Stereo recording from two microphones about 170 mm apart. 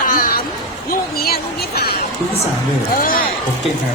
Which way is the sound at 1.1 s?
65° left (ahead or behind).